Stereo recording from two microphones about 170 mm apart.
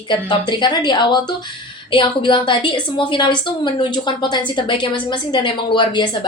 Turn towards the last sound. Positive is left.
turn(degrees=25)  # may be behind; listen again after turning